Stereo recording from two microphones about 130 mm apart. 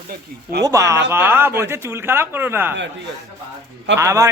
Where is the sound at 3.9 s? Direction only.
25° right (ahead or behind).